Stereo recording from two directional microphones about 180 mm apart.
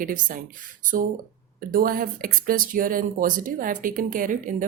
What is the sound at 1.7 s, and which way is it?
A woman's voice, 50° right (ahead or behind).